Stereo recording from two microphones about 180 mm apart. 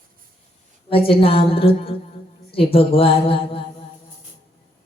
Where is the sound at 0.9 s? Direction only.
30° left (ahead or behind).